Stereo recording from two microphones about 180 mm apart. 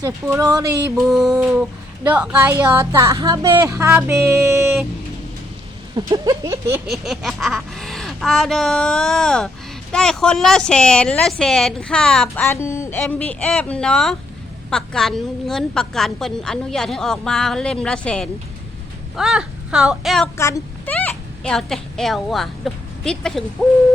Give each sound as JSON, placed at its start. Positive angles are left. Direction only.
{"t": 0.3, "sound": "speech", "side_deg": -10}
{"t": 0.5, "sound": "speech", "side_deg": -20}
{"t": 0.9, "sound": "a woman's voice", "side_deg": 0}
{"t": 6.1, "sound": "speech", "side_deg": -20}
{"t": 6.8, "sound": "a woman's voice", "side_deg": 0}
{"t": 12.5, "sound": "a woman's voice", "side_deg": 15}
{"t": 20.3, "sound": "a woman's voice", "side_deg": 15}